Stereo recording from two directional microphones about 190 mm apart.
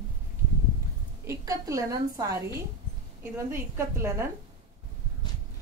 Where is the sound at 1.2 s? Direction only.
20° right (ahead or behind).